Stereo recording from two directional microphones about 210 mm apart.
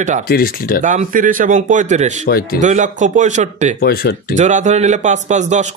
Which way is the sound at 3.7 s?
45° left (ahead or behind).